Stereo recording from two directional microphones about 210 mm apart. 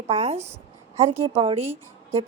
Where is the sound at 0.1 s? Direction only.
30° right (ahead or behind).